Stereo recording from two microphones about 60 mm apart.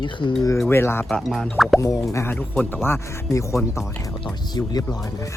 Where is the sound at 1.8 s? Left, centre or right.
Left.